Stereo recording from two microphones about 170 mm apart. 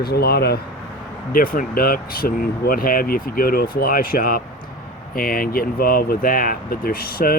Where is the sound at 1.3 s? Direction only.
55° left (ahead or behind).